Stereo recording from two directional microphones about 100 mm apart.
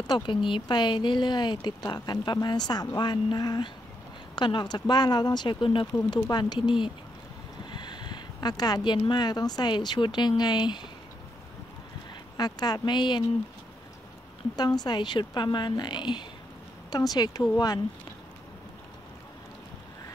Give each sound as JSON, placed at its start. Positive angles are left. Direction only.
{"t": 0.0, "sound": "speech", "side_deg": 50}
{"t": 5.9, "sound": "speech", "side_deg": 45}
{"t": 12.4, "sound": "speech", "side_deg": 40}
{"t": 14.6, "sound": "speech", "side_deg": 40}